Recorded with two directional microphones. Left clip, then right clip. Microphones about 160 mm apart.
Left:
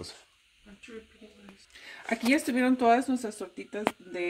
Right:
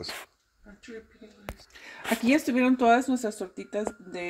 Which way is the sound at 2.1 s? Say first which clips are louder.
Right 2 dB; 40° right (ahead or behind).